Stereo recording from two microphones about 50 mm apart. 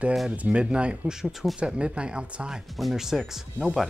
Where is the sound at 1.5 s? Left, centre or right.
Right.